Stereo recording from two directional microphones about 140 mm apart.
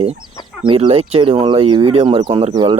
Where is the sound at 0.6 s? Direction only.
40° right (ahead or behind).